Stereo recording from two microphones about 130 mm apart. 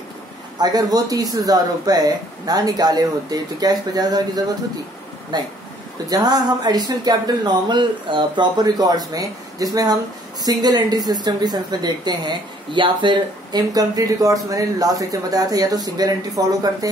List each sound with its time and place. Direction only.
0.6 s speech: 30° right (ahead or behind)
5.3 s speech: 35° right (ahead or behind)